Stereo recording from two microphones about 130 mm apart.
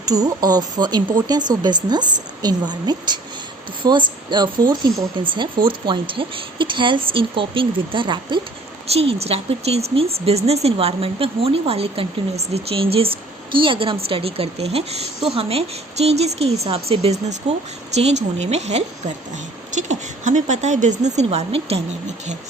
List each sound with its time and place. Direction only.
0.0 s speech: 30° right (ahead or behind)
8.9 s speech: 50° right (ahead or behind)